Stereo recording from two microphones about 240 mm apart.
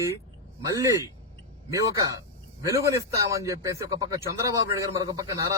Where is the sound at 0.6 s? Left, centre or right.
Centre.